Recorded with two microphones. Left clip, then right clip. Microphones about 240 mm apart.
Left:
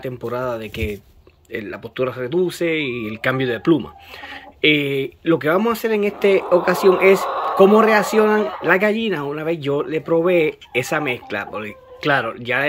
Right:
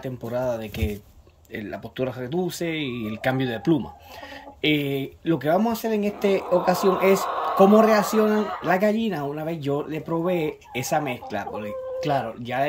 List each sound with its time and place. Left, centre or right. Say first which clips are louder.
0.0 s speech: left 3 dB; centre
7.2 s a sound: left 4 dB; left
7.6 s speech: left 4 dB; centre